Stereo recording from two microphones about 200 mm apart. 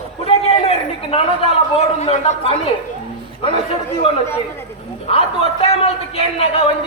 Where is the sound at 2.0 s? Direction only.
35° left (ahead or behind).